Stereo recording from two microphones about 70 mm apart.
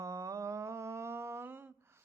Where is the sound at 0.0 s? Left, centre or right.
Right.